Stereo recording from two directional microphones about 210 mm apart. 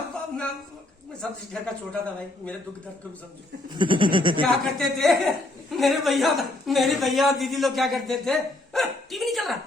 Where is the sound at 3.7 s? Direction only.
25° right (ahead or behind).